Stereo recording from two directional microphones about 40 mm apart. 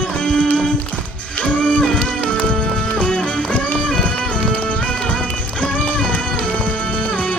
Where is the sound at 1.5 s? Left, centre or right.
Left.